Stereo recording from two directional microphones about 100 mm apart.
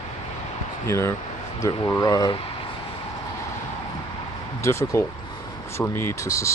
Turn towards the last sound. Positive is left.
turn(degrees=30)  # may be behind; listen again after turning